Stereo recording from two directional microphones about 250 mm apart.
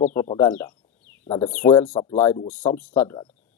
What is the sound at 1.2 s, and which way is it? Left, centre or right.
Speech, left.